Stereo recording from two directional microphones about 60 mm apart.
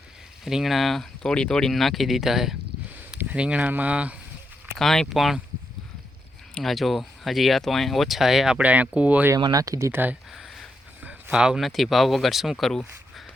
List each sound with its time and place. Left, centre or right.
0.4 s speech: centre
3.3 s speech: centre
4.8 s speech: centre
6.6 s speech: centre
8.5 s speech: right
9.3 s speech: right
9.9 s speech: right
10.3 s a sound: centre
11.0 s a sound: centre
11.6 s speech: centre